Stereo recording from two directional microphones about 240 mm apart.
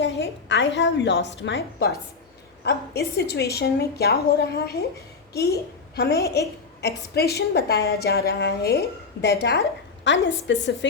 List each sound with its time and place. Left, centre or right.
0.0 s a woman's voice: left